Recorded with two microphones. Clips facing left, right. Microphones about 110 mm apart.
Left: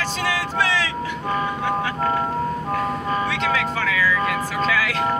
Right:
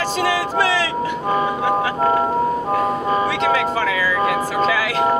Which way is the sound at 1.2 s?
10° right (ahead or behind).